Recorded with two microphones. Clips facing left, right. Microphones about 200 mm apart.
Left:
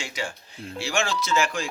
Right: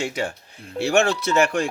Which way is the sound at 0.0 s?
60° right (ahead or behind).